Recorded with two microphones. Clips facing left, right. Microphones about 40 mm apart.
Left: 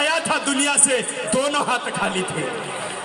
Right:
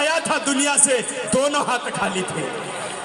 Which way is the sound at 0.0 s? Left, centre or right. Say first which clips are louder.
Even; left.